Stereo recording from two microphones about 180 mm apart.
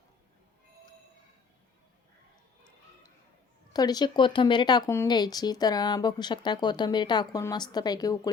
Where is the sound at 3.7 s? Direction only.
20° left (ahead or behind).